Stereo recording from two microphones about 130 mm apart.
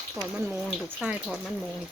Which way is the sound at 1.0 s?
10° right (ahead or behind).